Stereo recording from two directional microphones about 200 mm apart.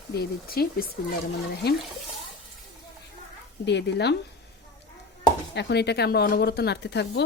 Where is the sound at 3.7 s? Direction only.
60° left (ahead or behind).